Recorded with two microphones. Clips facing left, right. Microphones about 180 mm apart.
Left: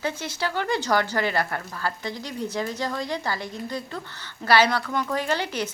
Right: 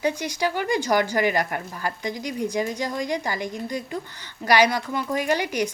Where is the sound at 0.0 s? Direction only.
15° right (ahead or behind).